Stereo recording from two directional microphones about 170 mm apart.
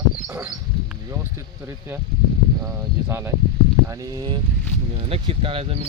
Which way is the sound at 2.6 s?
15° right (ahead or behind).